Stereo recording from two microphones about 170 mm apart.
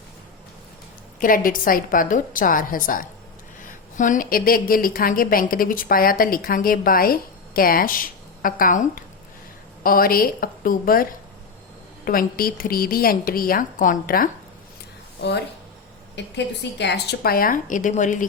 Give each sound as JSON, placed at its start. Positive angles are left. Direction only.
{"t": 1.2, "sound": "a woman's voice", "side_deg": 55}
{"t": 16.1, "sound": "a woman's voice", "side_deg": 90}